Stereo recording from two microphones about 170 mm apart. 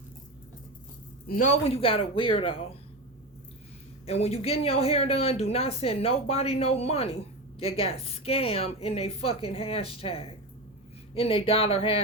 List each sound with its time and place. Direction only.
1.6 s speech: 35° left (ahead or behind)
4.0 s speech: 35° left (ahead or behind)